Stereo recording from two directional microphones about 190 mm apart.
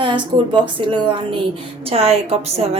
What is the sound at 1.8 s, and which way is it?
Speech, 30° right (ahead or behind).